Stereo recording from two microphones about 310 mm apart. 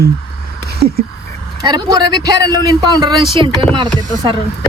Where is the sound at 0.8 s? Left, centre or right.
Right.